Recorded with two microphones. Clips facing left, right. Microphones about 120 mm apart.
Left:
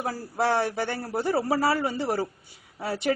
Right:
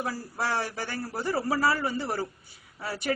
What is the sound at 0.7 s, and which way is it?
A man's voice, 20° left (ahead or behind).